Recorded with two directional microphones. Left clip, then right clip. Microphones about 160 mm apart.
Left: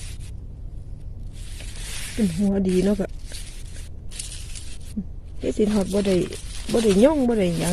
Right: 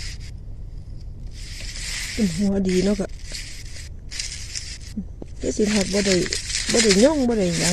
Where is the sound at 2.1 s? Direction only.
10° left (ahead or behind).